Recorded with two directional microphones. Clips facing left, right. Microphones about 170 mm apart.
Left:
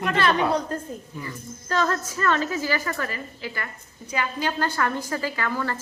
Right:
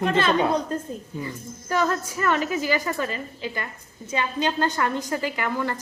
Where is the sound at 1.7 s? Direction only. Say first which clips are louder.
Right 1 dB; 10° right (ahead or behind).